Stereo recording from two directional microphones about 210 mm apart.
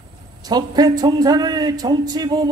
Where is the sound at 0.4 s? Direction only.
20° right (ahead or behind).